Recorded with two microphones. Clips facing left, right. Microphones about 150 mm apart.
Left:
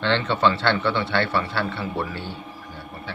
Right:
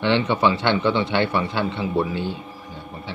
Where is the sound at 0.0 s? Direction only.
15° right (ahead or behind).